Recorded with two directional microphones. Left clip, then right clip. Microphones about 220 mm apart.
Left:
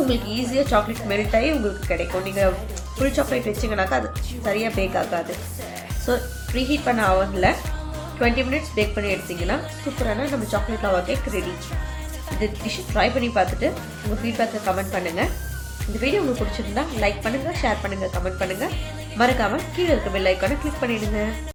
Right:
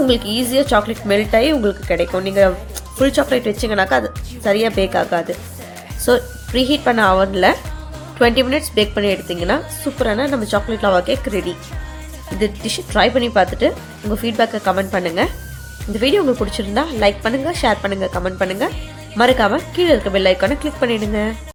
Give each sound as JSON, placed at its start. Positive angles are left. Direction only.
{"t": 0.1, "sound": "a woman's voice", "side_deg": -40}
{"t": 12.4, "sound": "a woman's voice", "side_deg": -45}